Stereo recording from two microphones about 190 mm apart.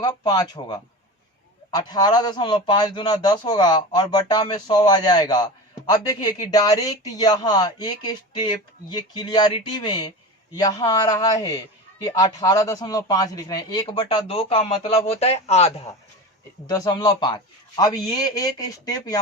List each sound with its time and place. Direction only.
0.0 s a man's voice: 20° left (ahead or behind)
16.6 s a man's voice: 20° left (ahead or behind)